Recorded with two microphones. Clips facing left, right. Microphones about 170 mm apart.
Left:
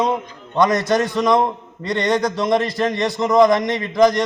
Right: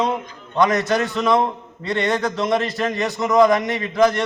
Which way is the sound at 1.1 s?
15° left (ahead or behind).